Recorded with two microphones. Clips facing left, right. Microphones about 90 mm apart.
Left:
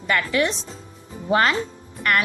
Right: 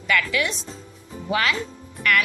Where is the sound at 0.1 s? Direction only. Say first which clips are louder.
Left 2 dB; 35° left (ahead or behind).